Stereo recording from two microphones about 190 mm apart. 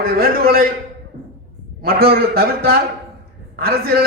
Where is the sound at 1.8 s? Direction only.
55° right (ahead or behind).